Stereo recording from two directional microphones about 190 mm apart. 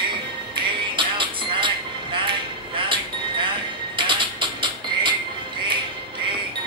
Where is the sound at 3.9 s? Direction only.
25° right (ahead or behind).